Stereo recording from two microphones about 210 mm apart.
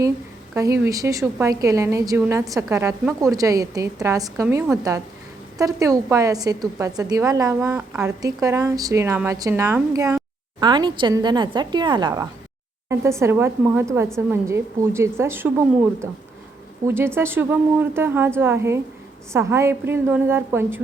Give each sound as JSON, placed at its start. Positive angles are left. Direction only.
{"t": 0.5, "sound": "a woman's voice", "side_deg": -15}
{"t": 16.8, "sound": "a woman's voice", "side_deg": -10}